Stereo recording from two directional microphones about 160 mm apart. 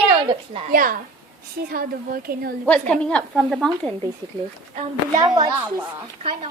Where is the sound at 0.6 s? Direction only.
60° right (ahead or behind).